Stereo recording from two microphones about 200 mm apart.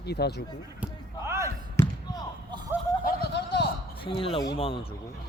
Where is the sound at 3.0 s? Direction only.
55° left (ahead or behind).